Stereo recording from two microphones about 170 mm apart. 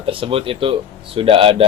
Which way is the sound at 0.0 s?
30° right (ahead or behind).